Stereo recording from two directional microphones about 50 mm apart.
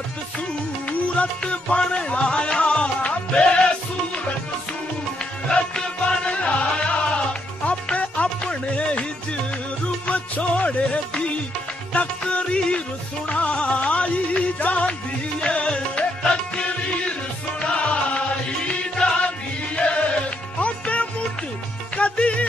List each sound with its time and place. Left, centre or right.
0.8 s music: left
5.5 s music: centre
10.0 s music: left
13.3 s music: left